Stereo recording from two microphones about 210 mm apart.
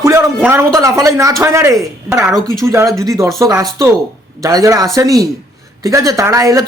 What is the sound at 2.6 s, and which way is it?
A man's voice, 15° right (ahead or behind).